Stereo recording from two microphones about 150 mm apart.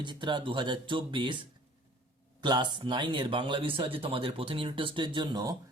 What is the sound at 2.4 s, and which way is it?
Speech, 30° right (ahead or behind).